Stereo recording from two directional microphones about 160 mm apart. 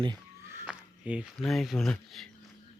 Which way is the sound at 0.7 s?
5° right (ahead or behind).